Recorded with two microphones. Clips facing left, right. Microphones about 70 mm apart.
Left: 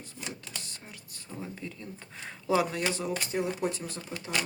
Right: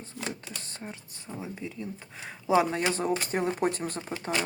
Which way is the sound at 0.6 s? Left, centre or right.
Right.